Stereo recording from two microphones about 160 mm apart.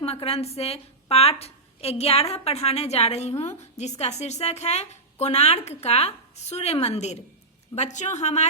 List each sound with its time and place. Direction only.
0.0 s a woman's voice: 40° left (ahead or behind)